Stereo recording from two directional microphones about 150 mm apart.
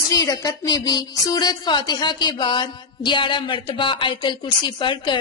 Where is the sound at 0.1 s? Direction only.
25° left (ahead or behind).